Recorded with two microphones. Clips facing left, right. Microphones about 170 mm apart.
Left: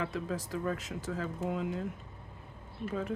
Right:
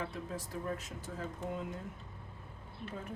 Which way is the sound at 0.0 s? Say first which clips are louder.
Left 5 dB; 90° left.